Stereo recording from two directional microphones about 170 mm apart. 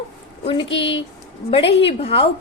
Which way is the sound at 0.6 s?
90° left.